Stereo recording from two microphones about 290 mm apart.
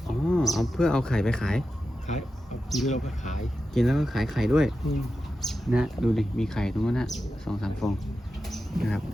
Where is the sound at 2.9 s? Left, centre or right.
Left.